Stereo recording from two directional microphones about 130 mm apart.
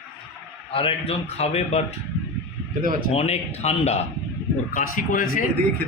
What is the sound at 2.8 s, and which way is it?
Speech, 90° right.